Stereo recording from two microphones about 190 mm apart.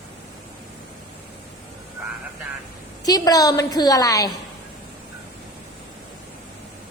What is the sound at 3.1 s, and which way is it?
A woman's voice, 20° left (ahead or behind).